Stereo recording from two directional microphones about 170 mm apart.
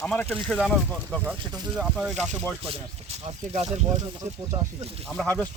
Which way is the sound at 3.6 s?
20° right (ahead or behind).